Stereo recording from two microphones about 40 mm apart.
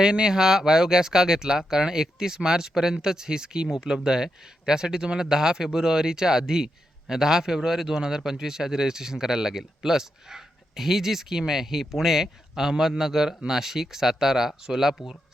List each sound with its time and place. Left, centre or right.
0.0 s speech: right